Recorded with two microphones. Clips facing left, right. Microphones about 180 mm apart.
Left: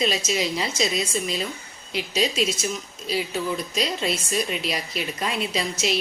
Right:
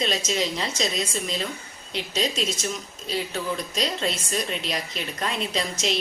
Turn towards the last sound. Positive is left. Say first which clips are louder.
# left 1 dB
turn(degrees=10)  # may be behind; listen again after turning